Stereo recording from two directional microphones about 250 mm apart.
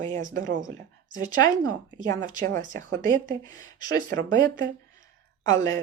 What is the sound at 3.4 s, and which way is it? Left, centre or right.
Speech, centre.